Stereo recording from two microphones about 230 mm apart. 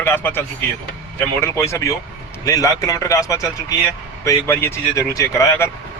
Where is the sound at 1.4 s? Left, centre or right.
Centre.